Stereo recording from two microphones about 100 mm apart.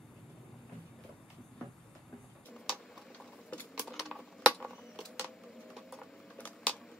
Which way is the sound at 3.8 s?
Centre (ahead or behind).